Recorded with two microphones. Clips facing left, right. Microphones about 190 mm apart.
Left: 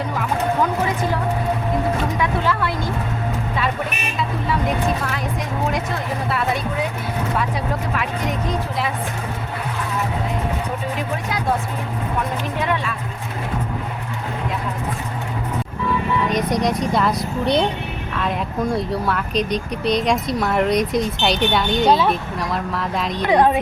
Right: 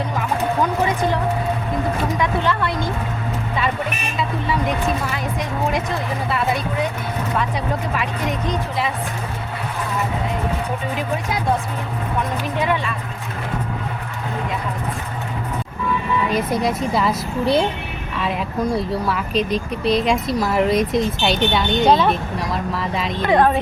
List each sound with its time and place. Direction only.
2.2 s speech: 5° left (ahead or behind)
12.5 s speech: centre (ahead or behind)
16.3 s speech: 5° right (ahead or behind)
23.2 s a woman's voice: 15° left (ahead or behind)